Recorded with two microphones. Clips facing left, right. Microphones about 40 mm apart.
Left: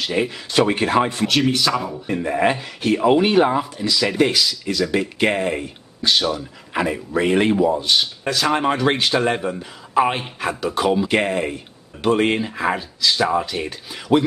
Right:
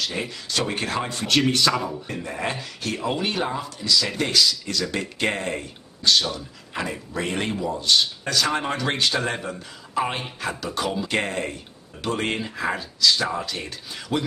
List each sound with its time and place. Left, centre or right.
0.0 s speech: centre
1.2 s a man's voice: centre
2.0 s speech: centre